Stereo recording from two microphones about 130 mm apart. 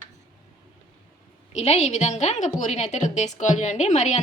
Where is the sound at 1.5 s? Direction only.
55° left (ahead or behind).